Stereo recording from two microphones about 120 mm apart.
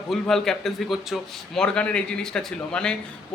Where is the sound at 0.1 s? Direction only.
5° left (ahead or behind).